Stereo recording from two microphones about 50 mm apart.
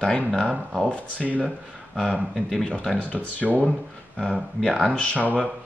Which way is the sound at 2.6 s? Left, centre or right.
Centre.